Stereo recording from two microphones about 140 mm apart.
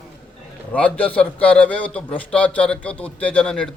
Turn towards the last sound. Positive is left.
turn(degrees=5)  # may be behind; listen again after turning